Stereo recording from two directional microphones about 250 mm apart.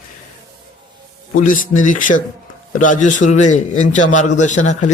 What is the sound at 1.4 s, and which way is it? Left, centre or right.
A man's voice, left.